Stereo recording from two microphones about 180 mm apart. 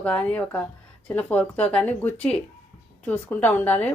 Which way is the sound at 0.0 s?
5° left (ahead or behind).